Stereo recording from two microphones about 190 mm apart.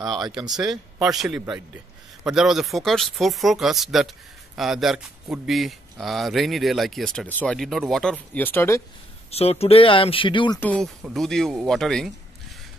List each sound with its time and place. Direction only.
0.9 s speech: centre (ahead or behind)
9.3 s speech: 30° left (ahead or behind)
10.6 s speech: 5° left (ahead or behind)